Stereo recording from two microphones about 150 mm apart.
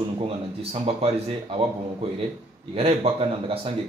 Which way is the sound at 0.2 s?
40° right (ahead or behind).